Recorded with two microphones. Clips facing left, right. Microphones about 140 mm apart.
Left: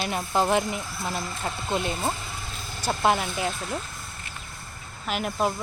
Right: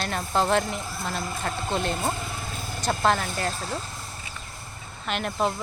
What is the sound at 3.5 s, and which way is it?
Speech, 35° right (ahead or behind).